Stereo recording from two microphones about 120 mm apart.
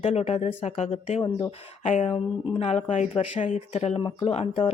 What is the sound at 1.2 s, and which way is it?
Speech, 50° left (ahead or behind).